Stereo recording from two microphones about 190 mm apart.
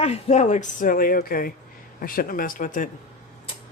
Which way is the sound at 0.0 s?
35° left (ahead or behind).